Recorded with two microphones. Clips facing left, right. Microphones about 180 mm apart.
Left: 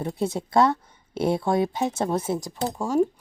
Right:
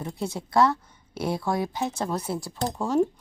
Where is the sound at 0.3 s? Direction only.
25° left (ahead or behind).